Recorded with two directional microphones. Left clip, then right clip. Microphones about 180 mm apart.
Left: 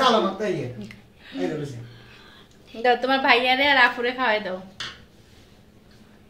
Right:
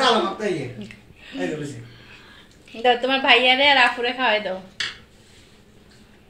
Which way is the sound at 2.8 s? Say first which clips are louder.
Right 1 dB; 5° right (ahead or behind).